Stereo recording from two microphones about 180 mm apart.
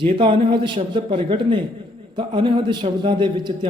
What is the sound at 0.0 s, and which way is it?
A man's voice, 30° right (ahead or behind).